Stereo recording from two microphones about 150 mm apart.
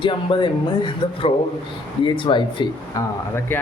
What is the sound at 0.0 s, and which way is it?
Mantra, 35° left (ahead or behind).